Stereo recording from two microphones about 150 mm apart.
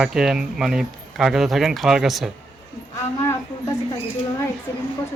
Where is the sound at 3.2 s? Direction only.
20° left (ahead or behind).